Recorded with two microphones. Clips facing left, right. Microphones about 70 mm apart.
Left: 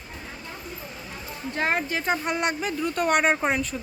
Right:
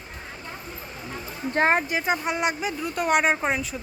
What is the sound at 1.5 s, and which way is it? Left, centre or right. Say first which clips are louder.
Speech: right 4 dB; right.